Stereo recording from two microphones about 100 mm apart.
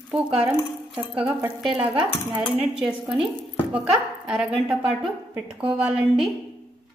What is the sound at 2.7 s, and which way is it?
A woman's voice, 10° right (ahead or behind).